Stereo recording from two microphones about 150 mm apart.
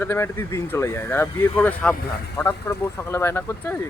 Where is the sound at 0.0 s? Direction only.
15° left (ahead or behind).